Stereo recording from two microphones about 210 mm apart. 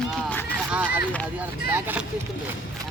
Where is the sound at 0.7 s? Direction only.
10° right (ahead or behind).